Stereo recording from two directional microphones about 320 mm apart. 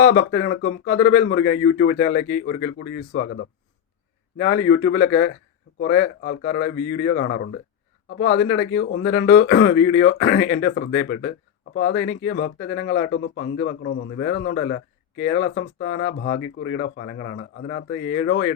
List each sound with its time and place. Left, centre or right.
0.0 s speech: left